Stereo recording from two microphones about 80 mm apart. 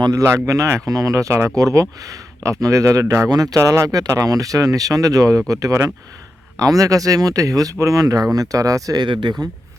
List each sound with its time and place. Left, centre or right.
0.1 s speech: right
3.2 s speech: right
9.0 s speech: right